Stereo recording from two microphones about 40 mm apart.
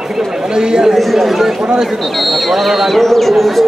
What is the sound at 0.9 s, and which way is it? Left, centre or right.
A man's voice, centre.